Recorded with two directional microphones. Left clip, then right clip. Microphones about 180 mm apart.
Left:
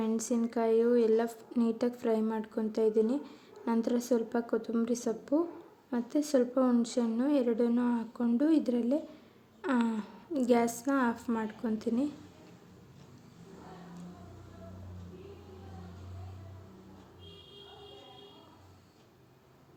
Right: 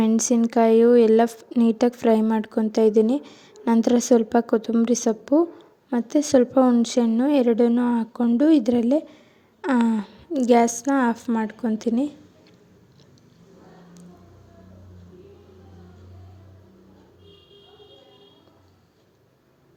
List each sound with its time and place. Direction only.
0.0 s a woman's voice: 45° right (ahead or behind)